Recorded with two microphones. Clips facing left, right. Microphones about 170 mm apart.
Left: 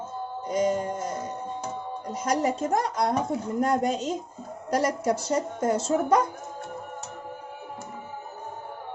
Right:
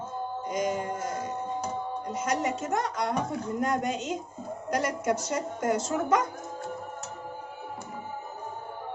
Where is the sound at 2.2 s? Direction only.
35° left (ahead or behind).